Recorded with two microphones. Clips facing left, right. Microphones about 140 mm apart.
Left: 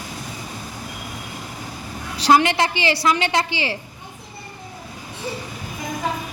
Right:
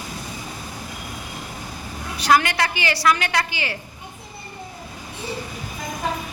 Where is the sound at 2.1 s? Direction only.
25° left (ahead or behind).